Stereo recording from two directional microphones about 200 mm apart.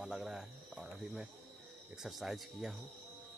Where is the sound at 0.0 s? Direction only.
Centre (ahead or behind).